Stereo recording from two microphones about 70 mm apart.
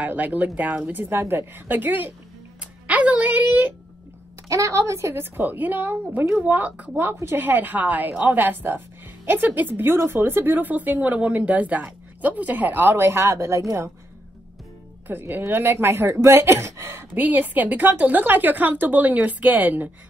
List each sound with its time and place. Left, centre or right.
0.0 s a woman's voice: right
1.0 s a woman's voice: right
2.6 s music: centre
4.5 s a woman's voice: right
15.0 s speech: right
17.1 s a woman's voice: right